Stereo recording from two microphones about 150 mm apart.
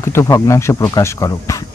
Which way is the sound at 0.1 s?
20° left (ahead or behind).